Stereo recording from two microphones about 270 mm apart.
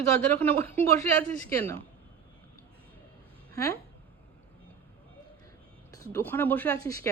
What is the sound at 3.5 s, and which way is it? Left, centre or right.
Speech, centre.